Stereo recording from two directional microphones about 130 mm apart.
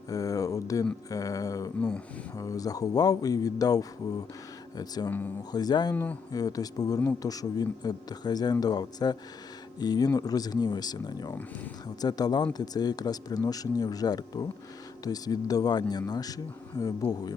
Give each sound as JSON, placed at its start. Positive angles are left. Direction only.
{"t": 0.1, "sound": "a sound", "side_deg": 25}
{"t": 1.1, "sound": "speech", "side_deg": 25}
{"t": 5.9, "sound": "speech", "side_deg": 15}
{"t": 6.3, "sound": "speech", "side_deg": 30}